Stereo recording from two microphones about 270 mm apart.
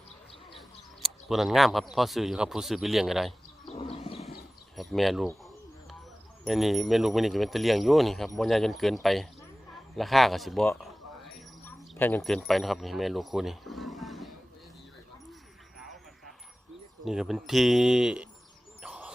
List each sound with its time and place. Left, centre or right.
1.3 s speech: centre
3.7 s wild animals: left
4.8 s speech: centre
6.4 s speech: centre
15.8 s a sound: centre
17.1 s speech: centre
18.8 s owl: centre